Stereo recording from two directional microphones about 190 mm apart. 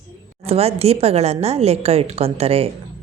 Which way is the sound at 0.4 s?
30° right (ahead or behind).